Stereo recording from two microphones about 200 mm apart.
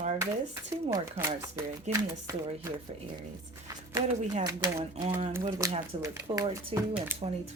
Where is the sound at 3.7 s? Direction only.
20° right (ahead or behind).